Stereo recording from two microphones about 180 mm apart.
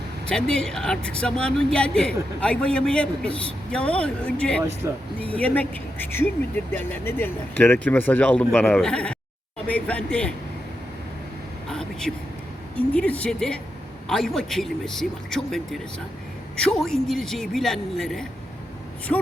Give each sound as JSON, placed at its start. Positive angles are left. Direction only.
{"t": 0.3, "sound": "speech", "side_deg": 5}
{"t": 4.8, "sound": "speech", "side_deg": -15}
{"t": 5.2, "sound": "speech", "side_deg": 10}
{"t": 11.7, "sound": "speech", "side_deg": 5}